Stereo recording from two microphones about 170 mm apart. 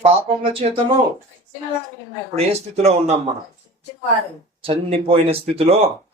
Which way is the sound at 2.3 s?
40° right (ahead or behind).